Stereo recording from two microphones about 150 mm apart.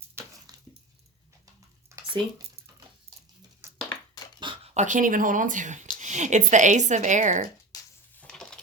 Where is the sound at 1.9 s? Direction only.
20° right (ahead or behind).